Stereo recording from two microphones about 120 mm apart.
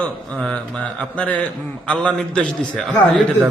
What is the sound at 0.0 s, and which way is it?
A man's voice, 5° left (ahead or behind).